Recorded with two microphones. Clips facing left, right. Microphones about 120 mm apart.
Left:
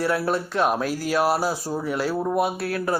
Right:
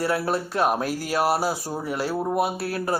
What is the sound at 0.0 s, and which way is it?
Speech, 40° right (ahead or behind).